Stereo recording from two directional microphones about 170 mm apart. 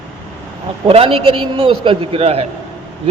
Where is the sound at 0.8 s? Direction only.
35° right (ahead or behind).